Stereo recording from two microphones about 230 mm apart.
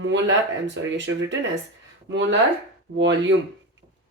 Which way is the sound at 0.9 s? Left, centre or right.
Right.